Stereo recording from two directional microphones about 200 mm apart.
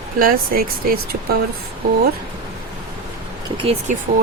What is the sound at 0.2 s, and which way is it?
Speech, 45° right (ahead or behind).